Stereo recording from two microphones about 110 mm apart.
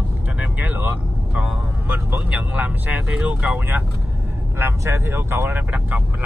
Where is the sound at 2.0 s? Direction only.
10° right (ahead or behind).